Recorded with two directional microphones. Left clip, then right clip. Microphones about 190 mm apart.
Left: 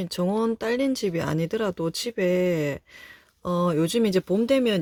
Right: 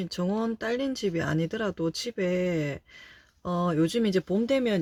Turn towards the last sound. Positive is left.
turn(degrees=35)  # may be behind; listen again after turning